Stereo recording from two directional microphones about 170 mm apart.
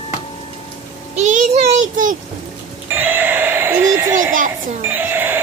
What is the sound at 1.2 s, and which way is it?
Child singing, 45° right (ahead or behind).